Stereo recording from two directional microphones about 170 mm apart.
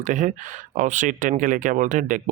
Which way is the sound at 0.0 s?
50° right (ahead or behind).